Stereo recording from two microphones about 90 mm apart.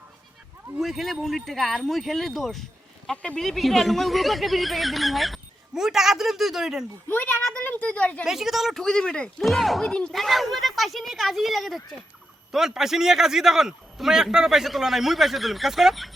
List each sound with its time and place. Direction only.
0.8 s speech: centre (ahead or behind)
7.1 s a child's voice: 20° left (ahead or behind)
8.2 s speech: 5° right (ahead or behind)